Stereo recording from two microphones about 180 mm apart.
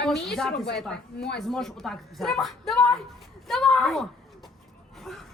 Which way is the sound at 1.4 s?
Centre (ahead or behind).